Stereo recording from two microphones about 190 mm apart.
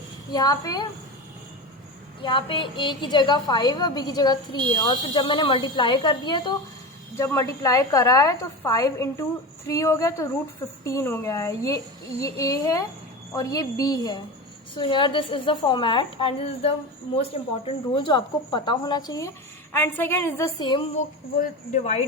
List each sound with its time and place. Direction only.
0.3 s a woman's voice: 20° left (ahead or behind)
2.2 s a woman's voice: 25° left (ahead or behind)
20.9 s speech: 45° left (ahead or behind)